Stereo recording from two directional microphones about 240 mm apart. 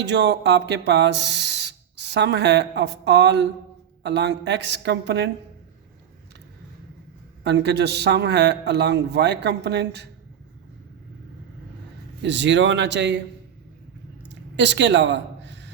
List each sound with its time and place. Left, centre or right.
0.0 s speech: right
7.4 s speech: right
12.2 s speech: right
14.3 s a sound: right